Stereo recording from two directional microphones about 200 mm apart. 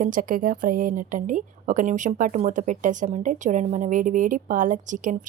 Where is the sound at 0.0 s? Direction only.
40° right (ahead or behind).